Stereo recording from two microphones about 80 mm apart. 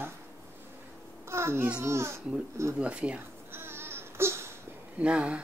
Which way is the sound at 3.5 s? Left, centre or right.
Right.